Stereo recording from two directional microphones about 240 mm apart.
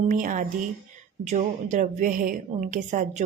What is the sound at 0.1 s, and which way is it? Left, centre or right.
A woman's voice, right.